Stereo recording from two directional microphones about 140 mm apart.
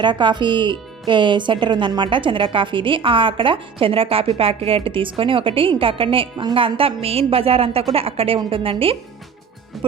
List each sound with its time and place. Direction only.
0.0 s speech: 35° right (ahead or behind)